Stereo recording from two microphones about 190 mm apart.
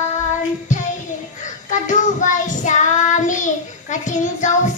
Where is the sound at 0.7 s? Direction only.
40° left (ahead or behind).